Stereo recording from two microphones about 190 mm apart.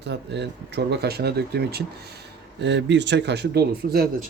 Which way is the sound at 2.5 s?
70° right (ahead or behind).